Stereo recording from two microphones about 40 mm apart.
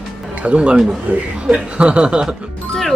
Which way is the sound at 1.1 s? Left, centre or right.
Right.